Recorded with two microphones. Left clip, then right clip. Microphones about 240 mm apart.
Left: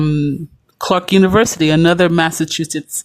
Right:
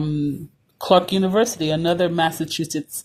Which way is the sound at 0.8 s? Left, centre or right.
Left.